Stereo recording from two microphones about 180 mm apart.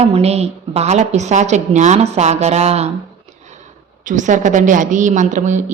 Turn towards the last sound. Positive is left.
turn(degrees=-45)  # may be behind; listen again after turning